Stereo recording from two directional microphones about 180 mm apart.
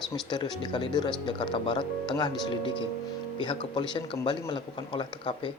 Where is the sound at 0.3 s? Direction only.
25° left (ahead or behind).